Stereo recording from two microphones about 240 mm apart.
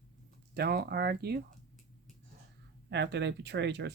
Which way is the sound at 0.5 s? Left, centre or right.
Right.